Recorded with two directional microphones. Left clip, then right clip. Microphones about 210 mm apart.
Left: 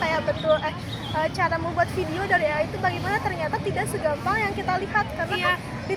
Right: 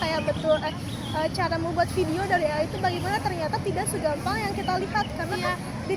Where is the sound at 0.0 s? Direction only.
15° right (ahead or behind).